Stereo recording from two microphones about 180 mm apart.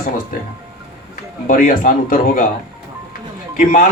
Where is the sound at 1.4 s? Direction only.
50° left (ahead or behind).